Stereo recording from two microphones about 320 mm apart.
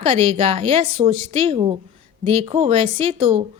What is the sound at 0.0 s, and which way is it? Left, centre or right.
A woman's voice, centre.